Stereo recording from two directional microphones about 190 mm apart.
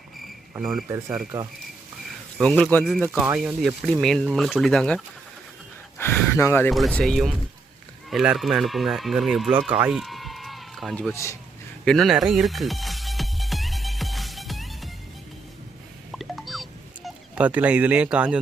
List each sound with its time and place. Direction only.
0.6 s speech: centre (ahead or behind)
0.9 s speech: 15° right (ahead or behind)
2.4 s speech: 5° left (ahead or behind)
6.7 s speech: centre (ahead or behind)
9.5 s speech: 25° right (ahead or behind)
9.7 s run: 5° right (ahead or behind)
11.1 s speech: 15° left (ahead or behind)
11.9 s music: centre (ahead or behind)
16.1 s a sound: centre (ahead or behind)